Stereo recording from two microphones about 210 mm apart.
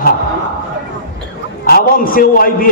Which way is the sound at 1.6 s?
45° left (ahead or behind).